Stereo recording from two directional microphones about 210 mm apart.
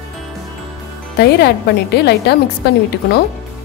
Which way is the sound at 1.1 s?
50° left (ahead or behind).